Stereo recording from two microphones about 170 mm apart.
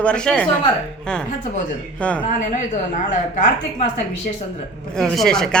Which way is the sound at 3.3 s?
45° left (ahead or behind).